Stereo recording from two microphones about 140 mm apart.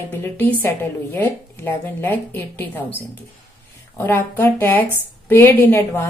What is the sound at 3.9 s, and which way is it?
A woman's voice, 15° left (ahead or behind).